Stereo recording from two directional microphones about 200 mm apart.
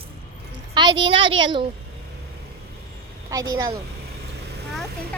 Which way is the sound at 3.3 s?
20° right (ahead or behind).